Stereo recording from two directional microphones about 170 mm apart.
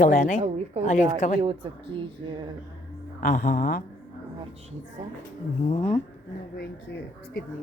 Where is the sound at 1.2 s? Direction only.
45° left (ahead or behind).